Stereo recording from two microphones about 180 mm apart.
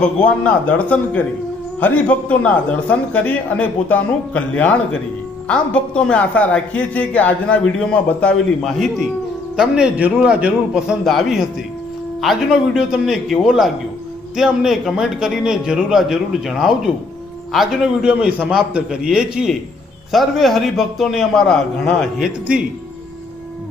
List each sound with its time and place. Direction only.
0.0 s a man's voice: 5° left (ahead or behind)